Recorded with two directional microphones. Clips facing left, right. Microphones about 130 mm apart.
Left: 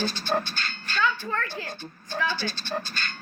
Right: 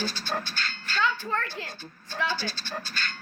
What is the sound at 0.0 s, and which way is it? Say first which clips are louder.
Speech: left 5 dB; 20° left (ahead or behind).